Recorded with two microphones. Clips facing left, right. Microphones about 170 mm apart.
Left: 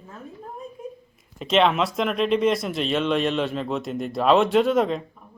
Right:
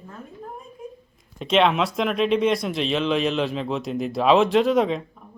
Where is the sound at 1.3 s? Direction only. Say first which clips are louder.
Even; centre (ahead or behind).